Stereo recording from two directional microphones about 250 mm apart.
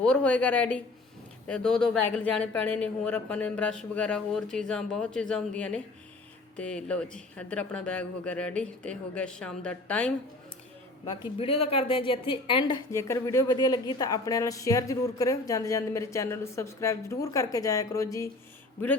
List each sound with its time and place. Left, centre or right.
0.0 s speech: centre
11.3 s speech: left